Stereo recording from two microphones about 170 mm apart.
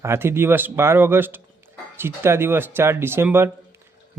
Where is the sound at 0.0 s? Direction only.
15° right (ahead or behind).